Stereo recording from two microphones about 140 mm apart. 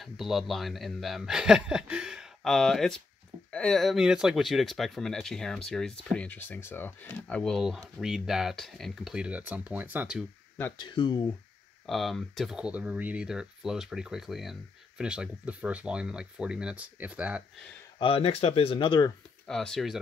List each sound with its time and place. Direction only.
0.0 s speech: centre (ahead or behind)
10.8 s speech: 35° left (ahead or behind)
11.8 s speech: centre (ahead or behind)
17.9 s speech: 40° left (ahead or behind)
19.4 s speech: 5° left (ahead or behind)